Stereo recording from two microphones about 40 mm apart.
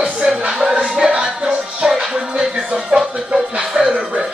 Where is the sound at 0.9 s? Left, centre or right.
Right.